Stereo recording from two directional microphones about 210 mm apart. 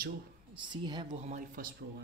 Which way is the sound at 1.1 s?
35° right (ahead or behind).